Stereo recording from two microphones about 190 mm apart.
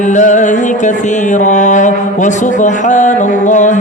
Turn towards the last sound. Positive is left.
turn(degrees=40)  # may be behind; listen again after turning